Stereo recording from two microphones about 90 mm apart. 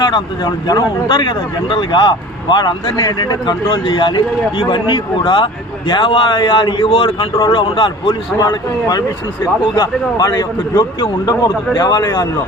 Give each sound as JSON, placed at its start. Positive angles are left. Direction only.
{"t": 0.0, "sound": "speech", "side_deg": 55}
{"t": 1.0, "sound": "speech", "side_deg": 60}
{"t": 6.8, "sound": "speech", "side_deg": 80}
{"t": 7.3, "sound": "speech", "side_deg": 55}
{"t": 8.4, "sound": "speech", "side_deg": 45}